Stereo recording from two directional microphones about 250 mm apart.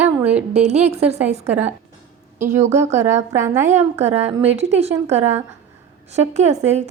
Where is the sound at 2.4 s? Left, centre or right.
Centre.